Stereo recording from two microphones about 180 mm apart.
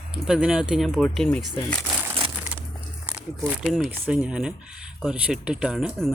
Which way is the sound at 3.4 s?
Centre (ahead or behind).